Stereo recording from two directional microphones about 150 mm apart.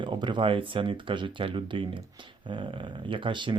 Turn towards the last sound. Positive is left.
turn(degrees=-35)  # may be behind; listen again after turning